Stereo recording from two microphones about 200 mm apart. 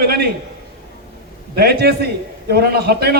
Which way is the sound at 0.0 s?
50° right (ahead or behind).